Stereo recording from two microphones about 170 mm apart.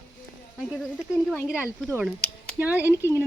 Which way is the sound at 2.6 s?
10° right (ahead or behind).